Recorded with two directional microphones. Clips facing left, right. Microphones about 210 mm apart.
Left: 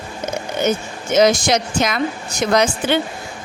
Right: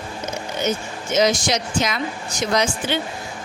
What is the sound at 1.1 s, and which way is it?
A woman's voice, 55° left (ahead or behind).